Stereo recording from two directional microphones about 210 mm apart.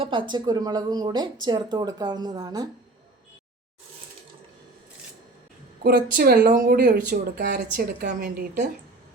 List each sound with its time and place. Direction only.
0.0 s speech: 25° right (ahead or behind)
5.8 s speech: 45° right (ahead or behind)